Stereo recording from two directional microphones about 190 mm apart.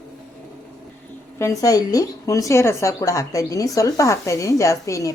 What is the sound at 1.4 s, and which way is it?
A woman's voice, 15° left (ahead or behind).